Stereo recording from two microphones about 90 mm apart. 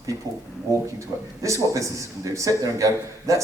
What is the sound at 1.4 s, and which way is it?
A man's voice, 35° right (ahead or behind).